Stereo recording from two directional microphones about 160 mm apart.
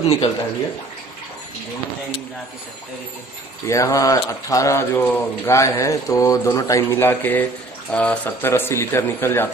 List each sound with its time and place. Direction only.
0.0 s speech: 25° left (ahead or behind)
3.6 s speech: 20° left (ahead or behind)